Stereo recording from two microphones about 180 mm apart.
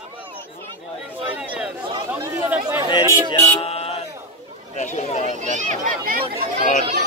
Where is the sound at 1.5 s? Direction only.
5° right (ahead or behind).